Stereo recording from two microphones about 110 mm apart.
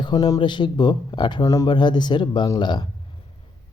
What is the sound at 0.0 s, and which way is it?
Speech, 40° left (ahead or behind).